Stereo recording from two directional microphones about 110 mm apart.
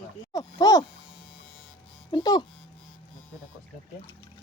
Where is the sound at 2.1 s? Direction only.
40° left (ahead or behind).